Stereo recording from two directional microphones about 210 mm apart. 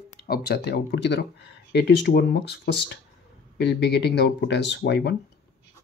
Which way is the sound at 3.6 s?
55° left (ahead or behind).